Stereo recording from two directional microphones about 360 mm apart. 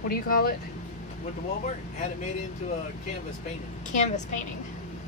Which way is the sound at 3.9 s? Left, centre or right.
Centre.